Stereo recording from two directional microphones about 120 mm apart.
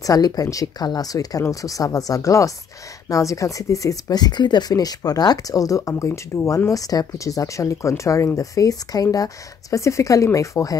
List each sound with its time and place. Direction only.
0.0 s speech: 30° left (ahead or behind)